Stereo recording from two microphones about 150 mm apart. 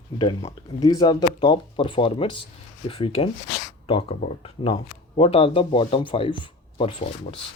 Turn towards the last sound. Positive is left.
turn(degrees=35)  # may be behind; listen again after turning